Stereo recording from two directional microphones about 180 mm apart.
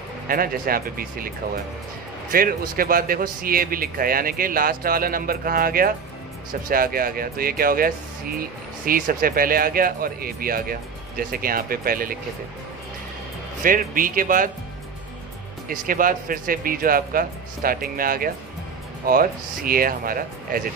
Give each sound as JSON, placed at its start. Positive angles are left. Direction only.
{"t": 0.3, "sound": "speech", "side_deg": -55}
{"t": 2.3, "sound": "speech", "side_deg": -55}
{"t": 13.6, "sound": "speech", "side_deg": -50}
{"t": 15.7, "sound": "speech", "side_deg": -50}